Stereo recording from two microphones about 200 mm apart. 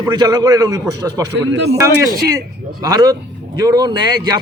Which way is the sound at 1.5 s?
60° right (ahead or behind).